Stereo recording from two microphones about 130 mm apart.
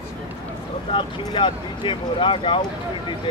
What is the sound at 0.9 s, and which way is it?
Speech, 35° left (ahead or behind).